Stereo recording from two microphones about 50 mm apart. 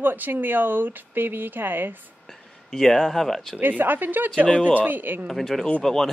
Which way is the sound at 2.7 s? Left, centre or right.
Centre.